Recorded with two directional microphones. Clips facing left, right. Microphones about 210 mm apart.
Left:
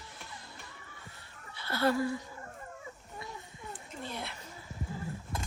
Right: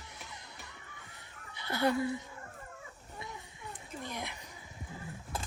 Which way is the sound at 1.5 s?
20° right (ahead or behind).